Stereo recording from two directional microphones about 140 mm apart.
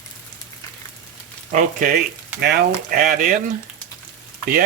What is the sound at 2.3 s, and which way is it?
Speech, 90° right.